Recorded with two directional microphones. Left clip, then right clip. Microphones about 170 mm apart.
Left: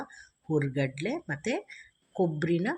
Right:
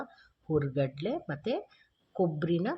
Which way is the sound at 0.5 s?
15° left (ahead or behind).